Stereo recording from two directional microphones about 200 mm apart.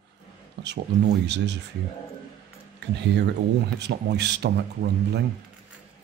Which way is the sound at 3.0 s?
60° right (ahead or behind).